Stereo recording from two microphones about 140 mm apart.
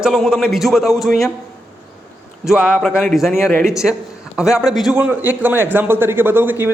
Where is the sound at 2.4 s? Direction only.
5° right (ahead or behind).